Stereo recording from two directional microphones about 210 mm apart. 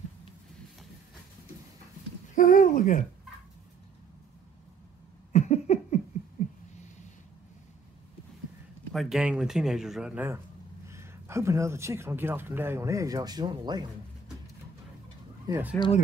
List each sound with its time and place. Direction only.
2.3 s speech: 40° left (ahead or behind)
5.3 s a sound: 35° left (ahead or behind)
8.9 s speech: centre (ahead or behind); by 13.8 s 20° right (ahead or behind)
15.4 s speech: 10° right (ahead or behind)